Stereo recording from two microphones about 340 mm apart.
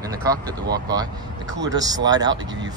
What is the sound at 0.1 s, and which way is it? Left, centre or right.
Speech, centre.